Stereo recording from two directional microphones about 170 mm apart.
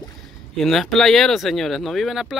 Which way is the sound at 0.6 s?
Centre (ahead or behind).